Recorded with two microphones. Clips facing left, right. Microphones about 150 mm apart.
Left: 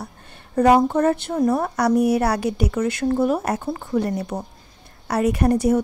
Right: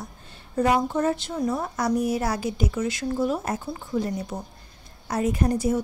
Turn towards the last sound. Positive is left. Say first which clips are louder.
# left 5 dB
turn(degrees=65)  # may be behind; listen again after turning